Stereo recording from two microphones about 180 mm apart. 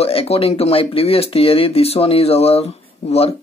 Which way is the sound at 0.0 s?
35° left (ahead or behind).